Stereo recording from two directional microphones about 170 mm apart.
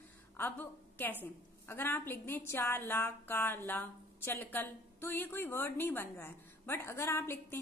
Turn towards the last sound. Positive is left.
turn(degrees=15)  # may be behind; listen again after turning